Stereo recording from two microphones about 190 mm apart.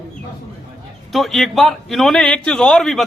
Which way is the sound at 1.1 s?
Centre (ahead or behind).